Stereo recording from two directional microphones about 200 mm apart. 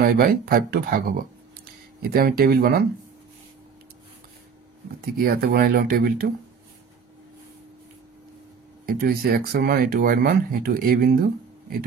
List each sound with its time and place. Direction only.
0.0 s speech: 45° right (ahead or behind)
5.0 s speech: 50° right (ahead or behind)
8.8 s speech: 50° right (ahead or behind)